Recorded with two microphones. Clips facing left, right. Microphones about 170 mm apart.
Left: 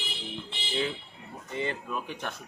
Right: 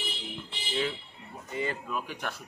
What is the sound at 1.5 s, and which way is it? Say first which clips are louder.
Speech: even; 25° left (ahead or behind).